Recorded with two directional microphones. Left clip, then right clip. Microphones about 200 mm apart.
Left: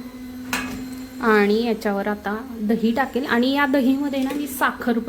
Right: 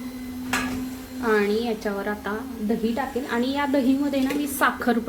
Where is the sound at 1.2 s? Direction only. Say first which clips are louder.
Left 4 dB; 30° left (ahead or behind).